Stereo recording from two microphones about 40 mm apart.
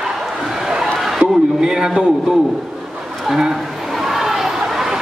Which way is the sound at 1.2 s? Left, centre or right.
Centre.